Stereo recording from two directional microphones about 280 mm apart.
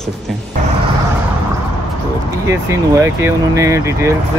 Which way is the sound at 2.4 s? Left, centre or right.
Centre.